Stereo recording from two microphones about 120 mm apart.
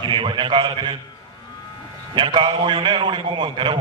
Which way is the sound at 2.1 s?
40° right (ahead or behind).